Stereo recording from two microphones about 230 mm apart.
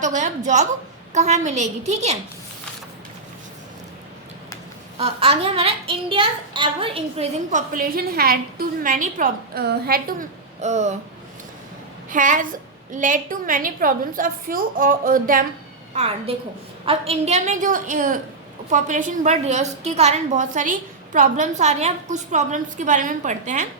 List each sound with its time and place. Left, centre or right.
0.0 s a child's voice: right
4.9 s a child's voice: right
12.1 s a child's voice: right